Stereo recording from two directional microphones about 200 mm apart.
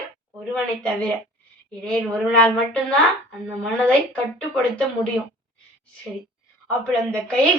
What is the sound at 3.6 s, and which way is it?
A man's voice, 5° left (ahead or behind).